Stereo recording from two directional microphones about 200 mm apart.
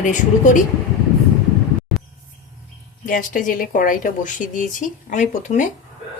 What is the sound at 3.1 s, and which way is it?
A woman's voice, 45° left (ahead or behind).